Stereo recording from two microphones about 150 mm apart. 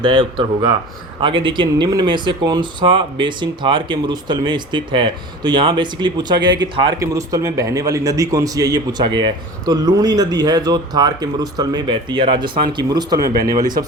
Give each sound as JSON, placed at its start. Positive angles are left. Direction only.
{"t": 0.0, "sound": "a man's voice", "side_deg": -30}